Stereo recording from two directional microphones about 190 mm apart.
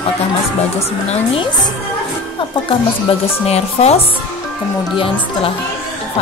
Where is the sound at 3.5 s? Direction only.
35° left (ahead or behind).